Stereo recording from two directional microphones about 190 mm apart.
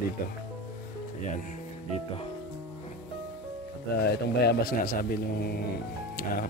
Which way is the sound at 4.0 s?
60° left (ahead or behind).